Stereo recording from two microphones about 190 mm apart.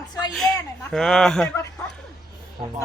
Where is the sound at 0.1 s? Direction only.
20° left (ahead or behind).